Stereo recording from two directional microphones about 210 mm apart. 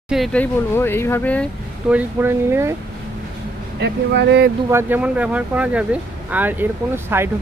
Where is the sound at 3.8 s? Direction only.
55° right (ahead or behind).